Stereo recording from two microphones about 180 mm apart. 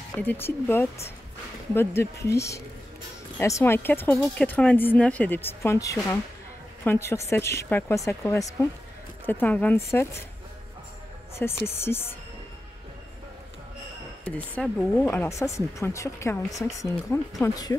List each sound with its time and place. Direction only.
0.1 s speech: 10° left (ahead or behind)
11.3 s speech: 15° left (ahead or behind)
14.2 s speech: 10° left (ahead or behind)